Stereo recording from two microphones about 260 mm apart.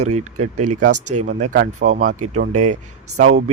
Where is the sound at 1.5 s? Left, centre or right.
Right.